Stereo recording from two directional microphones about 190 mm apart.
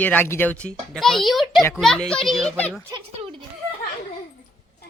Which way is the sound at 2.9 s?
25° right (ahead or behind).